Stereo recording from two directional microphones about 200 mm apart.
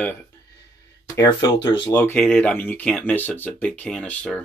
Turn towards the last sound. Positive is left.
turn(degrees=5)  # may be behind; listen again after turning